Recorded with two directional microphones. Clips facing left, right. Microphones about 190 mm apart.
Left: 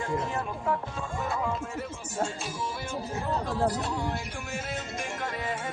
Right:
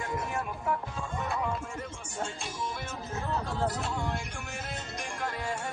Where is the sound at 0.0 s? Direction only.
25° left (ahead or behind).